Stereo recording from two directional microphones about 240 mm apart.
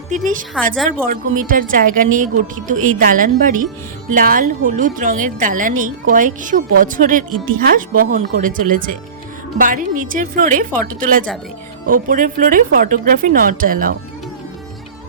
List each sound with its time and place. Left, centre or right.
0.1 s a woman's voice: right